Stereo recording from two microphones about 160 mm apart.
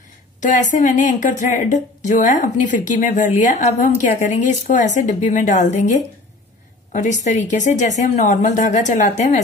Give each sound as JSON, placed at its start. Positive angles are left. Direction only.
{"t": 0.4, "sound": "speech", "side_deg": 50}